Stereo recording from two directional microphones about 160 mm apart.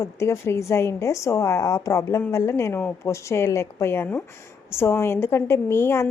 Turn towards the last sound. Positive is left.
turn(degrees=15)  # may be behind; listen again after turning